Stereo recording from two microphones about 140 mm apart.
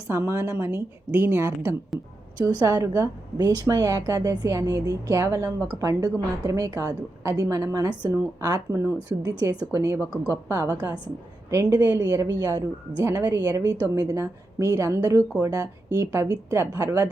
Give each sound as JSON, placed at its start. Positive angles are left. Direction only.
{"t": 0.1, "sound": "a woman's voice", "side_deg": -20}
{"t": 2.4, "sound": "a woman's voice", "side_deg": -30}